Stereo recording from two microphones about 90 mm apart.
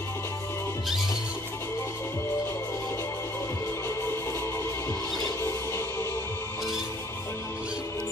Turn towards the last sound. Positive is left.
turn(degrees=30)  # may be behind; listen again after turning